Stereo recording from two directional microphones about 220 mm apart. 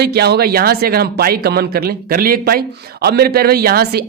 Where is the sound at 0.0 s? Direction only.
45° right (ahead or behind).